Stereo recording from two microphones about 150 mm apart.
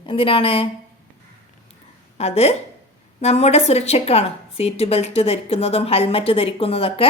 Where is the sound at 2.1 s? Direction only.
45° left (ahead or behind).